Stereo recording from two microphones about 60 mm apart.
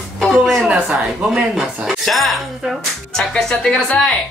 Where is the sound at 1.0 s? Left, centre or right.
Centre.